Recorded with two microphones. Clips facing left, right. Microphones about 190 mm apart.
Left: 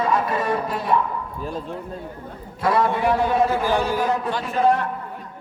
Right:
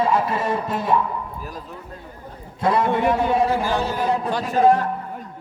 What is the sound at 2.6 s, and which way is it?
Speech, 25° right (ahead or behind).